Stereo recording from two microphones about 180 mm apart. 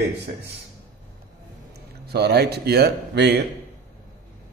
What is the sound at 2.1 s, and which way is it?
Speech, 65° right (ahead or behind).